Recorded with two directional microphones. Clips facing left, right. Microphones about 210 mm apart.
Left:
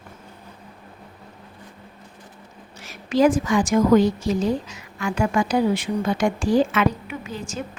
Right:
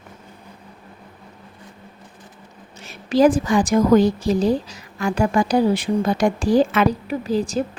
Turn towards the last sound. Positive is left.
turn(degrees=-35)  # may be behind; listen again after turning